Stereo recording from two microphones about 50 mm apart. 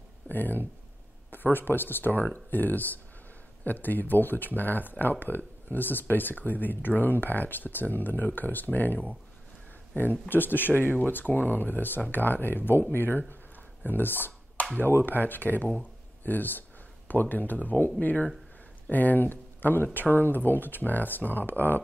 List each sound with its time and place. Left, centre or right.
0.3 s speech: left
10.2 s speech: left
13.8 s a sound: left
15.0 s speech: left